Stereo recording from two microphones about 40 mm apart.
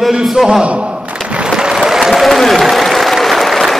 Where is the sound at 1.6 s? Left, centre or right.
Centre.